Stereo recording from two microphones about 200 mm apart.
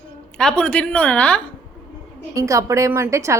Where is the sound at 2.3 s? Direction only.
15° right (ahead or behind).